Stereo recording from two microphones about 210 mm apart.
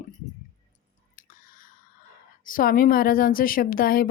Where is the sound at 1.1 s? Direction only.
40° left (ahead or behind).